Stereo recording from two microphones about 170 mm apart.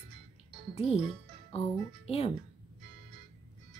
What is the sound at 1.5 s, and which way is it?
Speech, 35° left (ahead or behind).